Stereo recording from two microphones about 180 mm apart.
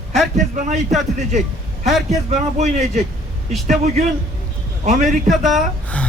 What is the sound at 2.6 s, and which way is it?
Speech, 40° right (ahead or behind).